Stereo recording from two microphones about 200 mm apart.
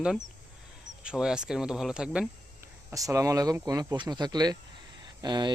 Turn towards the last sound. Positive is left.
turn(degrees=-20)  # may be behind; listen again after turning